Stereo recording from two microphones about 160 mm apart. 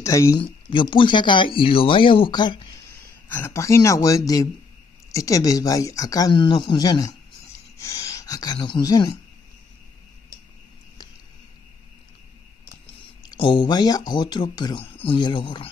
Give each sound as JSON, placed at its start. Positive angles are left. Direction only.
{"t": 0.0, "sound": "speech", "side_deg": 20}
{"t": 0.4, "sound": "speech", "side_deg": 30}
{"t": 3.3, "sound": "speech", "side_deg": 15}
{"t": 13.2, "sound": "speech", "side_deg": 30}